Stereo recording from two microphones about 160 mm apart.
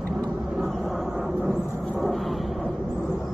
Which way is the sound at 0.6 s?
Centre (ahead or behind).